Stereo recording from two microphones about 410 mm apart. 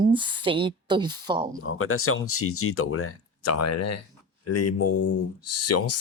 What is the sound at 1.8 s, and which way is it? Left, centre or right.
Speech, left.